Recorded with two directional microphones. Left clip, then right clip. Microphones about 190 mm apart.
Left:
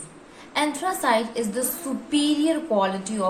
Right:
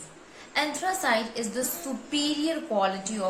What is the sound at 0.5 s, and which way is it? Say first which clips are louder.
A woman's voice: left 3 dB; 20° left (ahead or behind).